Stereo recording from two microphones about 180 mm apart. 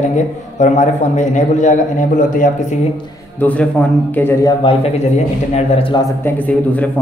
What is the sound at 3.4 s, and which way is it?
A man's voice, 10° left (ahead or behind).